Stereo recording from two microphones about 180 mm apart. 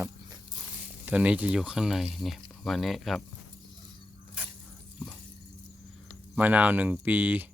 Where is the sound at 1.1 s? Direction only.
10° right (ahead or behind).